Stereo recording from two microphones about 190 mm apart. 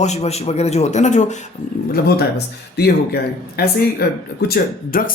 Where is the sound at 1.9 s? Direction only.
55° left (ahead or behind).